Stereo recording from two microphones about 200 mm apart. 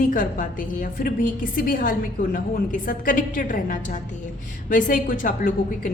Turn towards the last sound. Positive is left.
turn(degrees=40)  # may be behind; listen again after turning